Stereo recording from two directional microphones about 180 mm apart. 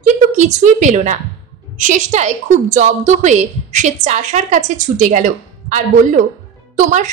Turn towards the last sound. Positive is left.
turn(degrees=-45)  # may be behind; listen again after turning